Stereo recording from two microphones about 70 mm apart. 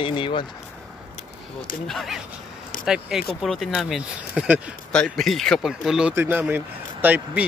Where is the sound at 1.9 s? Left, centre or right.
Centre.